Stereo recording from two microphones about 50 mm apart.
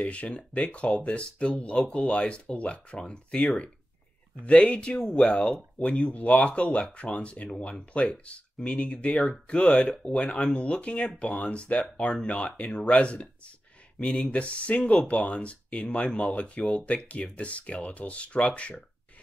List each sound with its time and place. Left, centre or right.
0.0 s speech: left